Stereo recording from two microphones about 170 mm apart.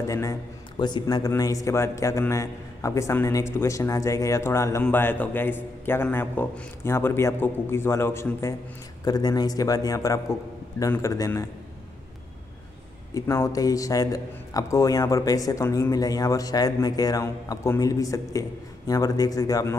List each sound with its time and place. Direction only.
0.0 s a man's voice: 20° left (ahead or behind)
13.1 s a man's voice: 20° left (ahead or behind)